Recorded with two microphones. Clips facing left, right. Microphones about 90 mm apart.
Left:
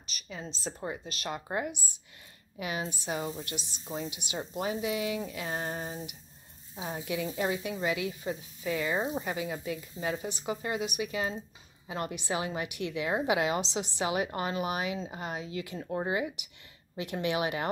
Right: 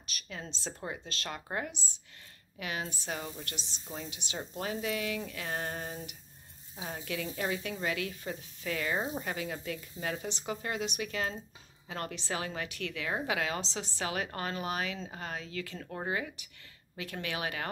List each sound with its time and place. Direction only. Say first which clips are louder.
0.1 s speech: left 2 dB; 5° left (ahead or behind); by 17.6 s 20° left (ahead or behind)